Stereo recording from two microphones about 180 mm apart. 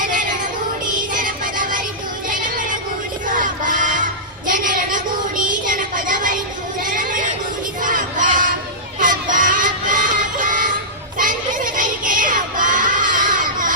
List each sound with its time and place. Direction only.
1.1 s music: 45° right (ahead or behind)
2.3 s a sound: 45° right (ahead or behind)
3.2 s battle cry: 45° right (ahead or behind)
4.4 s a sound: 50° right (ahead or behind)
6.8 s child singing: 50° right (ahead or behind)
7.8 s crowd: 50° right (ahead or behind)
9.0 s music: 45° right (ahead or behind)
11.2 s children shouting: 50° right (ahead or behind)